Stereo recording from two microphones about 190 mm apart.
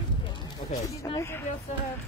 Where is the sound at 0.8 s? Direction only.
15° left (ahead or behind).